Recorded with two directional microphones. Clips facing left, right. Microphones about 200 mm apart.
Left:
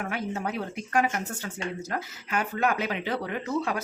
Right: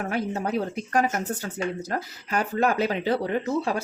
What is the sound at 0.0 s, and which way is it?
Speech, 40° right (ahead or behind).